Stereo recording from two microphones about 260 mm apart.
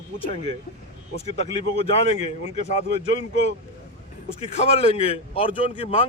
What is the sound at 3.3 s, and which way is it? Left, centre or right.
Speech, right.